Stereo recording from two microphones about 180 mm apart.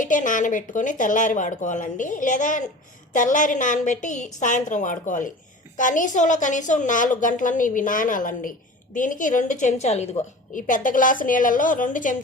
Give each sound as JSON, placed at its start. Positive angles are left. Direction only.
{"t": 0.0, "sound": "a woman's voice", "side_deg": 45}